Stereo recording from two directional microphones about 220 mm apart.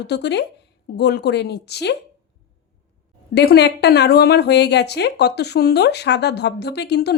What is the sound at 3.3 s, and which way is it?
A woman's voice, 50° left (ahead or behind).